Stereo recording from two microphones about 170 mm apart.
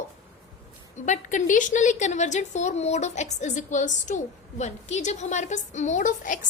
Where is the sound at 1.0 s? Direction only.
50° left (ahead or behind).